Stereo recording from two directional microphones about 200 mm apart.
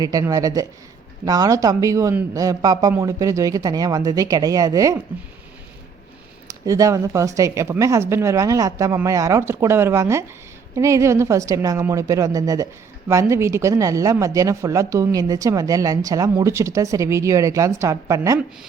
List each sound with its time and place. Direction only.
0.0 s speech: 20° right (ahead or behind)
6.5 s speech: 15° right (ahead or behind)